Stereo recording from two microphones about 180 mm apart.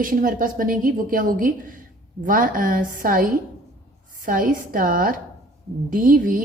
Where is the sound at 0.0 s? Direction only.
50° right (ahead or behind).